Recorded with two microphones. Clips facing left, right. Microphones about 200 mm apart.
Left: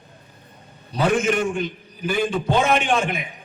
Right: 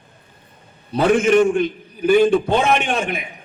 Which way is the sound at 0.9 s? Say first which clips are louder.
Right 6 dB; 60° right (ahead or behind).